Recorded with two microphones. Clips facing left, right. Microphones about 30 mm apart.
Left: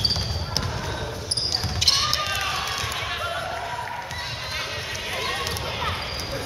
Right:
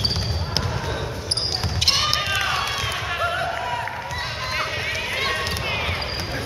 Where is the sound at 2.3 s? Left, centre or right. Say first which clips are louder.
Right 4 dB; right.